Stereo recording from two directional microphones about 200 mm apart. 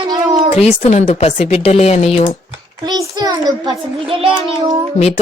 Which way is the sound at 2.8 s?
20° right (ahead or behind).